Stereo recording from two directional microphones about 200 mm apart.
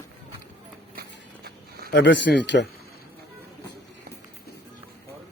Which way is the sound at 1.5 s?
50° right (ahead or behind).